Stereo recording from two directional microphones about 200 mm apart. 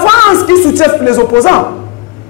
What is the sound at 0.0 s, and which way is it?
Music, 15° left (ahead or behind).